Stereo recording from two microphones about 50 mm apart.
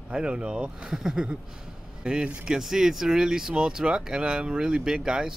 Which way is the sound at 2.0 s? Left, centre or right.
Centre.